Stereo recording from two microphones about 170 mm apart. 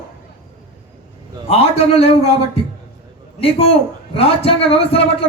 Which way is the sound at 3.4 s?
35° left (ahead or behind).